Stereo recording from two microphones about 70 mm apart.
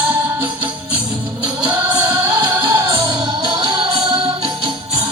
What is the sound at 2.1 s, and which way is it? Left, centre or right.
Music, right.